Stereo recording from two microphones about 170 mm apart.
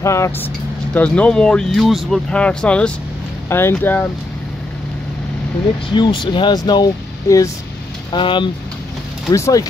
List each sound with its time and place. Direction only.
0.0 s speech: 15° left (ahead or behind)
5.9 s speech: 30° left (ahead or behind)